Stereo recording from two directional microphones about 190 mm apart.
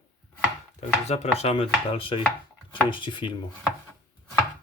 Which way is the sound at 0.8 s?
35° left (ahead or behind).